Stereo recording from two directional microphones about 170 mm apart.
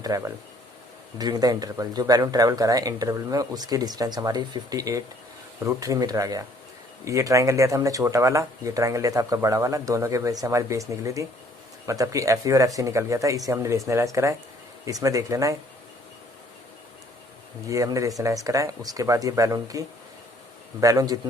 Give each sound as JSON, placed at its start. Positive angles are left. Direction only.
{"t": 0.1, "sound": "speech", "side_deg": -20}
{"t": 17.7, "sound": "speech", "side_deg": -20}
{"t": 20.8, "sound": "speech", "side_deg": -20}